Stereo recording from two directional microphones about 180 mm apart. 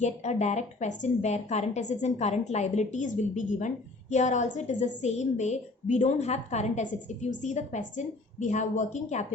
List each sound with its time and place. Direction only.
0.0 s a woman's voice: 40° left (ahead or behind)